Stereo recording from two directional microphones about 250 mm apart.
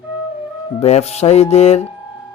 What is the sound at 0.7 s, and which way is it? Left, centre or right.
Speech, left.